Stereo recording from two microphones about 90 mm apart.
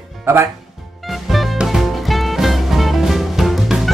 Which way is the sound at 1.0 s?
Centre (ahead or behind).